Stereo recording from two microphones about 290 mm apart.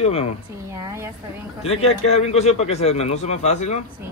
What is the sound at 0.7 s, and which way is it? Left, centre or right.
Speech, centre.